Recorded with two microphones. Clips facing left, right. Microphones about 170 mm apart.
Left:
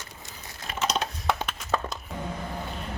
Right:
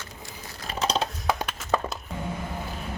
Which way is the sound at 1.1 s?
Centre (ahead or behind).